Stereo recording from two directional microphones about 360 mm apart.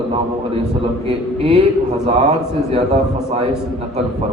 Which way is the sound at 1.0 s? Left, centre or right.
Centre.